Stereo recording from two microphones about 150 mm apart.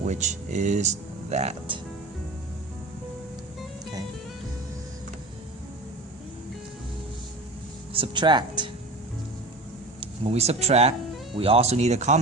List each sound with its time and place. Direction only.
0.0 s speech: 50° right (ahead or behind)
7.9 s speech: 35° right (ahead or behind)
10.0 s speech: 40° right (ahead or behind)